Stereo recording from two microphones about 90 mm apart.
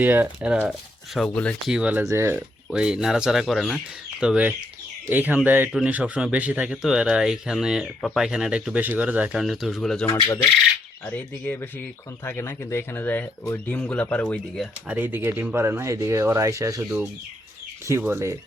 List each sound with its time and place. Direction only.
0.0 s speech: 20° right (ahead or behind)
1.2 s speech: 10° left (ahead or behind)
1.6 s speech: 10° right (ahead or behind)
2.0 s speech: 30° right (ahead or behind)
2.7 s speech: 10° right (ahead or behind)
4.2 s speech: 10° right (ahead or behind)
9.3 s speech: 5° right (ahead or behind)
11.0 s speech: 20° left (ahead or behind)
14.8 s speech: 20° right (ahead or behind)
18.0 s speech: 30° right (ahead or behind)